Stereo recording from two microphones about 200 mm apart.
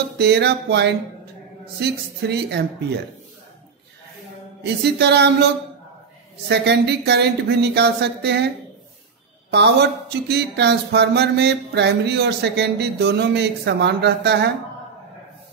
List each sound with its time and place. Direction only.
0.2 s speech: 55° right (ahead or behind)
4.9 s speech: 55° right (ahead or behind)
6.5 s speech: 60° right (ahead or behind)
9.5 s speech: 55° right (ahead or behind)